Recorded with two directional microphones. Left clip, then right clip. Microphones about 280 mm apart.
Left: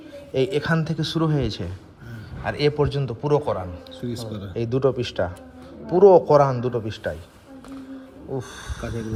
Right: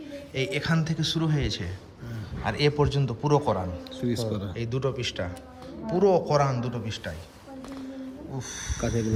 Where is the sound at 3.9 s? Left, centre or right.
Right.